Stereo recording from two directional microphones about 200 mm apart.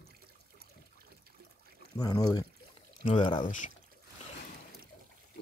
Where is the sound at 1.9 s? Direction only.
20° left (ahead or behind).